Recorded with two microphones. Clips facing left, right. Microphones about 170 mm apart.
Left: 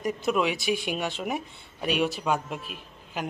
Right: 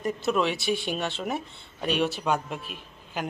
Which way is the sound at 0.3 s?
5° left (ahead or behind).